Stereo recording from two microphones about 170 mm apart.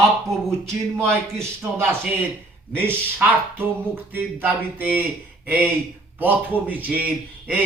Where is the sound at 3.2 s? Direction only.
10° right (ahead or behind).